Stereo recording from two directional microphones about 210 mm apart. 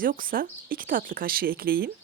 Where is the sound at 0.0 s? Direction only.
40° right (ahead or behind).